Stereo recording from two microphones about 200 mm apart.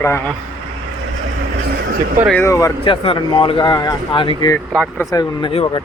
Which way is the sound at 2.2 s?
10° left (ahead or behind).